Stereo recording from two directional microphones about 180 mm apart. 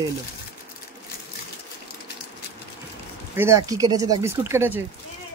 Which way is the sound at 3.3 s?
15° right (ahead or behind).